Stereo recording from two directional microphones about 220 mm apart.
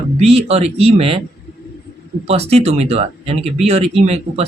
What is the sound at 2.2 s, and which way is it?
A man's voice, 30° right (ahead or behind).